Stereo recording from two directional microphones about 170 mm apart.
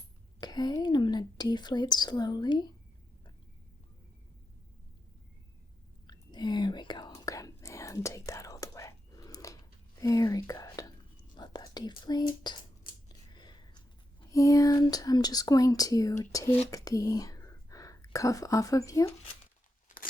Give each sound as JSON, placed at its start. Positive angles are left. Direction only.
{"t": 0.3, "sound": "a woman's voice", "side_deg": 25}
{"t": 6.1, "sound": "whispering", "side_deg": 25}
{"t": 12.4, "sound": "a sound", "side_deg": 25}
{"t": 14.3, "sound": "speech", "side_deg": 20}